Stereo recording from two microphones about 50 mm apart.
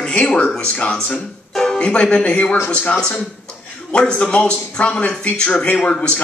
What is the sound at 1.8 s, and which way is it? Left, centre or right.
A man's voice, left.